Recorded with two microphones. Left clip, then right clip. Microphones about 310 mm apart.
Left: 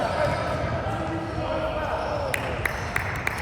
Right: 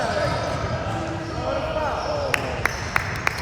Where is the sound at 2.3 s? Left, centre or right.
Right.